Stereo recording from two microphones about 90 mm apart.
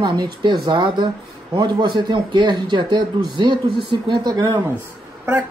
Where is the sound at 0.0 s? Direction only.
55° right (ahead or behind).